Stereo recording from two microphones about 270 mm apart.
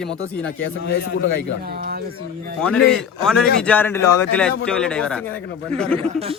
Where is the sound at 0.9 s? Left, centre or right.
Left.